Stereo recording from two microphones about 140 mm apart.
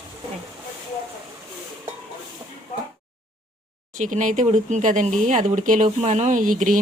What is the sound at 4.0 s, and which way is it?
Speech, 65° right (ahead or behind).